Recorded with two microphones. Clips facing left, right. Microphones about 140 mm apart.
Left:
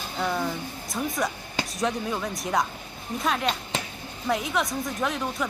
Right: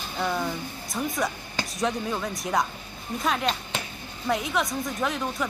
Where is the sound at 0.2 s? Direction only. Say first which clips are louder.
Even; centre (ahead or behind).